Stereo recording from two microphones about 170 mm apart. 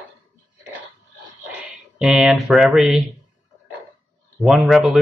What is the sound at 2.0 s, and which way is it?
Speech, centre (ahead or behind).